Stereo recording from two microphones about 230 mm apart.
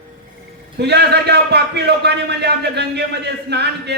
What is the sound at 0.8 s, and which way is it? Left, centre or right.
A man's voice, right.